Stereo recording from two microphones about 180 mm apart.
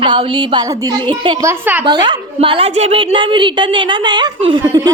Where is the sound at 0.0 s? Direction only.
30° right (ahead or behind).